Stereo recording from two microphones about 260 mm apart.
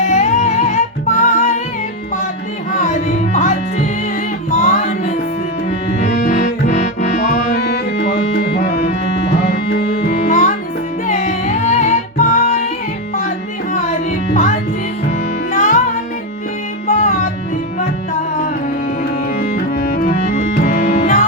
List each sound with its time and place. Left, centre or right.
0.0 s music: left
2.7 s music: left
14.3 s music: left
16.8 s music: left
19.4 s music: left